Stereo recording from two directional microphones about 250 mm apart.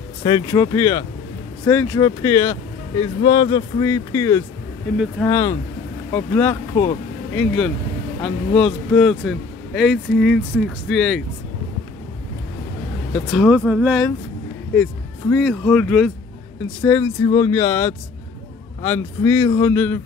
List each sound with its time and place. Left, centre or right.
0.2 s a man's voice: centre
13.1 s a man's voice: centre
17.0 s speech: centre